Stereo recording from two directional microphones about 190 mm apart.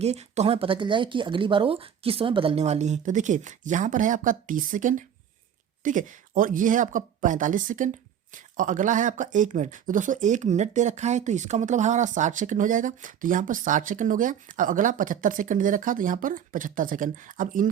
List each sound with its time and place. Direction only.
0.0 s speech: 35° right (ahead or behind)